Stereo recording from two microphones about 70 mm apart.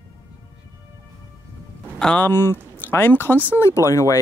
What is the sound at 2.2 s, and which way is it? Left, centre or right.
Speech, left.